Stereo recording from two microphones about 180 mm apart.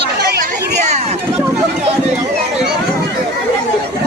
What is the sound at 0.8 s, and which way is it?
Chatter, 40° right (ahead or behind).